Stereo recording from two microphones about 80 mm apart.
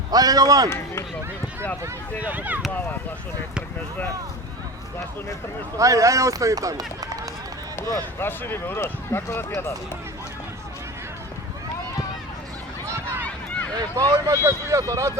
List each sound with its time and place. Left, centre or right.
0.1 s speech: right
2.2 s speech: centre
5.7 s speech: right
7.8 s speech: left
13.9 s speech: right